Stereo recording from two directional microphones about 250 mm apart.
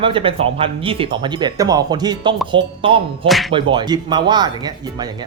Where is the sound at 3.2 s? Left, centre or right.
Centre.